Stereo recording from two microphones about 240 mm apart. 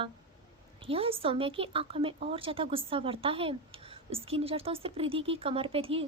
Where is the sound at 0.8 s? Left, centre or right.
Right.